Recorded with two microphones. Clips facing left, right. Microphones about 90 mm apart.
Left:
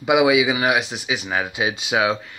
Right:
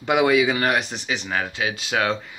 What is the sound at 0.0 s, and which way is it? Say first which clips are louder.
Speech: left 2 dB; 5° left (ahead or behind).